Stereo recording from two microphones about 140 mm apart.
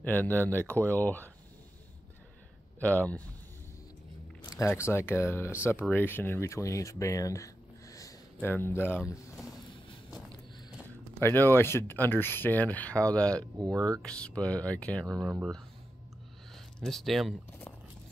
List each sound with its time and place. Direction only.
0.0 s speech: 15° left (ahead or behind)
2.8 s speech: 10° left (ahead or behind)
4.6 s speech: 20° left (ahead or behind)
11.1 s speech: 15° left (ahead or behind)
13.6 s speech: 25° right (ahead or behind)
14.0 s speech: 10° left (ahead or behind)
16.5 s speech: centre (ahead or behind)